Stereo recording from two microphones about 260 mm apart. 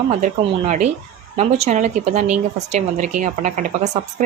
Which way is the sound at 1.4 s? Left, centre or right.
Right.